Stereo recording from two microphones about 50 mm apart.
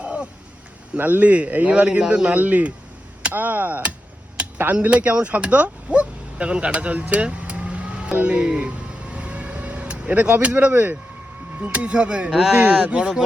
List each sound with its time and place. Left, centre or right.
0.0 s a sound: right
0.9 s speech: right
2.3 s chop: right
4.4 s a sound: right
4.9 s speech: right
8.4 s vehicle: centre
11.6 s speech: right
12.3 s speech: centre
12.8 s speech: right